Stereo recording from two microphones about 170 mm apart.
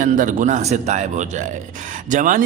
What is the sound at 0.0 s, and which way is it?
A man's voice, 50° right (ahead or behind).